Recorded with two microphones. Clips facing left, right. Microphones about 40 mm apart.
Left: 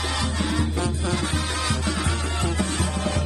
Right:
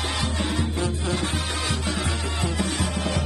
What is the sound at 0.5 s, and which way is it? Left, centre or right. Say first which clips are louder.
Music: left 1 dB; left.